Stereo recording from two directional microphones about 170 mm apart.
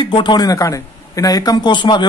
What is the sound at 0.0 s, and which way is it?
Speech, 30° left (ahead or behind).